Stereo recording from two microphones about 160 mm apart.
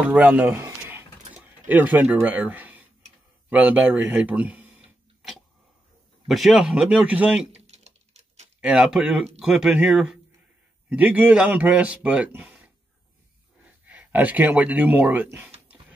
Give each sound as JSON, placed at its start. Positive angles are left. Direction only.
{"t": 0.0, "sound": "a sound", "side_deg": -10}
{"t": 1.7, "sound": "a man's voice", "side_deg": -10}
{"t": 6.2, "sound": "speech", "side_deg": 0}
{"t": 7.5, "sound": "patter", "side_deg": -45}
{"t": 8.5, "sound": "a man's voice", "side_deg": -5}